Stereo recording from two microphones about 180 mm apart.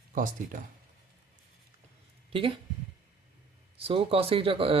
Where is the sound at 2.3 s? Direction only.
30° right (ahead or behind).